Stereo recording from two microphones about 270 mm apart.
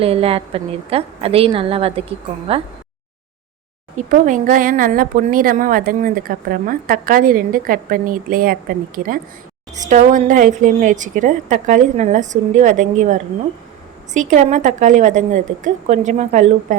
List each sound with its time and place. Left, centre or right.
0.0 s a woman's voice: right
3.9 s speech: right
9.8 s a woman's voice: right